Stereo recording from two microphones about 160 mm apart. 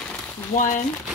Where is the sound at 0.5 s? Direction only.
55° left (ahead or behind).